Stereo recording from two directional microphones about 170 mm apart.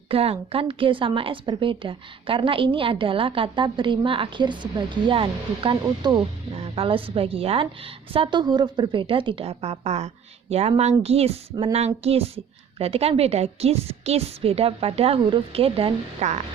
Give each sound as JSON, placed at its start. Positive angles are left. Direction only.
{"t": 0.1, "sound": "a woman's voice", "side_deg": -35}